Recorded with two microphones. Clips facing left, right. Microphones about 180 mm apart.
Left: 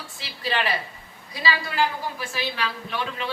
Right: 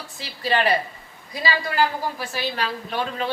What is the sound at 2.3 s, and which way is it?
A woman's voice, 40° right (ahead or behind).